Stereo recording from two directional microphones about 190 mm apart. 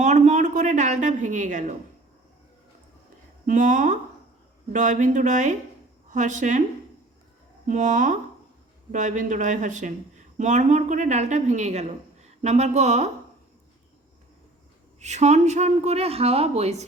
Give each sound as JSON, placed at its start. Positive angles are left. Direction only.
{"t": 0.0, "sound": "a sound", "side_deg": -40}
{"t": 3.4, "sound": "a woman's voice", "side_deg": -40}
{"t": 7.7, "sound": "a woman's voice", "side_deg": -40}
{"t": 15.0, "sound": "a woman's voice", "side_deg": -35}